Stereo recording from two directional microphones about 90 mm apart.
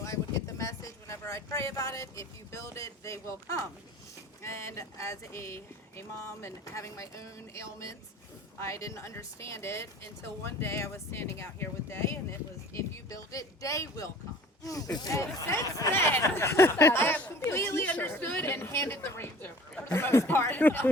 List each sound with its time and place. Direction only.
0.0 s speech: 35° left (ahead or behind)
15.1 s speech: 35° left (ahead or behind)